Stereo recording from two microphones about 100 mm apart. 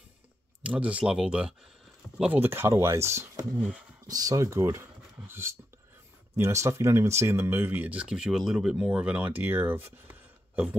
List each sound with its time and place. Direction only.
0.6 s speech: 15° right (ahead or behind)
2.4 s speech: 25° right (ahead or behind)
3.5 s speech: 10° right (ahead or behind)
4.1 s speech: 35° right (ahead or behind); by 10.8 s 15° right (ahead or behind)